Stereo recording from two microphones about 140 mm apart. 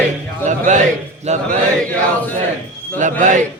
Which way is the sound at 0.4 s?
60° right (ahead or behind).